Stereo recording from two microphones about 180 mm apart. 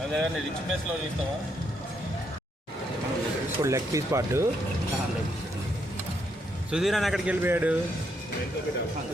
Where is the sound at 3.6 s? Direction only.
15° right (ahead or behind).